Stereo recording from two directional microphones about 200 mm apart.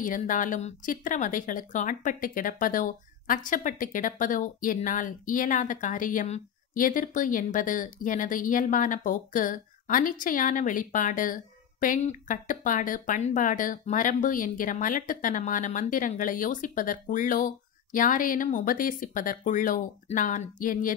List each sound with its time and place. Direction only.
0.0 s speech: 40° left (ahead or behind)